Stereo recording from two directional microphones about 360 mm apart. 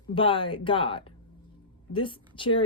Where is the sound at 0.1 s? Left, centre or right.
Centre.